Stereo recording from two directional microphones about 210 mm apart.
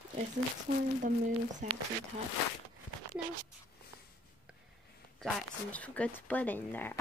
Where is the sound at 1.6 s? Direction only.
35° right (ahead or behind).